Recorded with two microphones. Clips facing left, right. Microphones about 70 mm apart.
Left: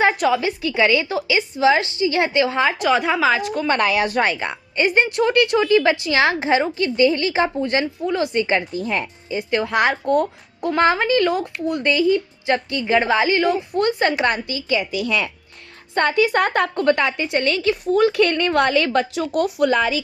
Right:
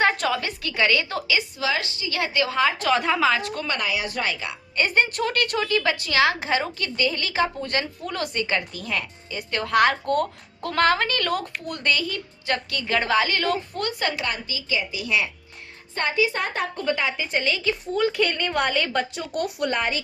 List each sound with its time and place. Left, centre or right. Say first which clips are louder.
0.3 s a woman's voice: left 7 dB; centre
1.4 s a woman's voice: left 9 dB; left
2.9 s a woman's voice: left 3 dB; centre
3.8 s speech: left 9 dB; left
4.1 s a woman's voice: left 7 dB; left
4.8 s a woman's voice: left 4 dB; left
14.2 s a woman's voice: left 8 dB; left
16.0 s a woman's voice: left 7 dB; left